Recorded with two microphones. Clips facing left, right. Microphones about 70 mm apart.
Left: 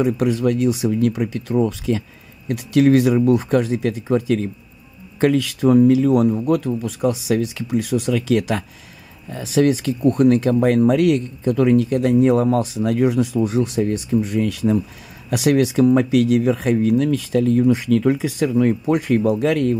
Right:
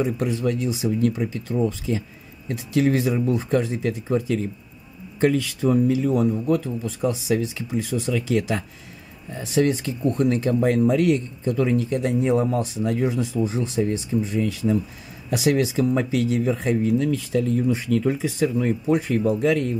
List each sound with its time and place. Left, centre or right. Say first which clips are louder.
0.0 s speech: left 5 dB; left